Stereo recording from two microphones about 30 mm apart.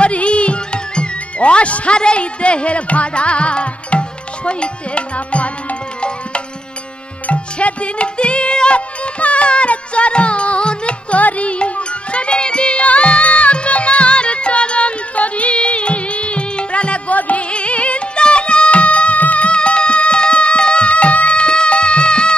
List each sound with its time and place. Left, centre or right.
0.0 s music: left
7.3 s music: left
11.1 s music: left
17.1 s music: left
17.5 s music: left
19.5 s music: left